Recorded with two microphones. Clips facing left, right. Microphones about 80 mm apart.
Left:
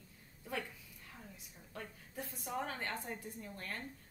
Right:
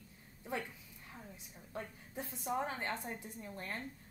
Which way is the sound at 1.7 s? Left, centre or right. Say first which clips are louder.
Right 2 dB; right.